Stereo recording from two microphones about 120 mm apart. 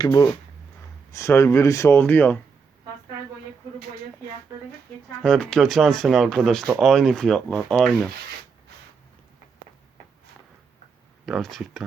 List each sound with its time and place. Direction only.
0.0 s speech: 35° left (ahead or behind); by 2.4 s 15° left (ahead or behind)
5.2 s speech: 5° left (ahead or behind)
11.3 s speech: centre (ahead or behind)